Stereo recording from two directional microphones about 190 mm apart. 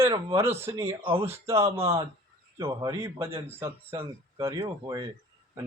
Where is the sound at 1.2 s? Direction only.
15° right (ahead or behind).